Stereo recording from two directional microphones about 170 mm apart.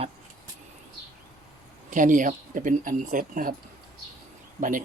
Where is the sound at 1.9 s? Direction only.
50° right (ahead or behind).